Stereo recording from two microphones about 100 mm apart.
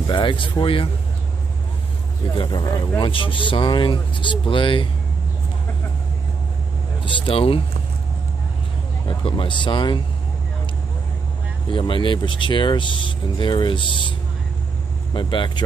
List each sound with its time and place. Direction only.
0.0 s speech: 55° left (ahead or behind)
2.3 s speech: 45° left (ahead or behind)
3.0 s speech: 60° left (ahead or behind)
7.1 s speech: 65° left (ahead or behind)
9.0 s speech: 55° left (ahead or behind)
11.7 s speech: 55° left (ahead or behind)
15.1 s speech: 55° left (ahead or behind)